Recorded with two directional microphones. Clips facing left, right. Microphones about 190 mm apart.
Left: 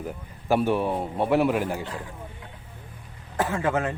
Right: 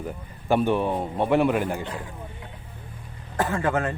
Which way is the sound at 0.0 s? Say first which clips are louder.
Right 1 dB; 5° left (ahead or behind).